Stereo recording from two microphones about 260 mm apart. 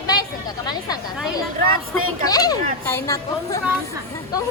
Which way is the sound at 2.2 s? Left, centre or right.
Centre.